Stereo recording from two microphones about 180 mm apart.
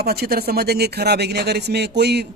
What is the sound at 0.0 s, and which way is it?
A woman's voice, 60° right (ahead or behind).